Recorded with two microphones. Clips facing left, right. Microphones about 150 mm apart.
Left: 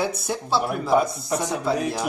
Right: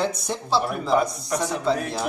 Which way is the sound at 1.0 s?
25° left (ahead or behind).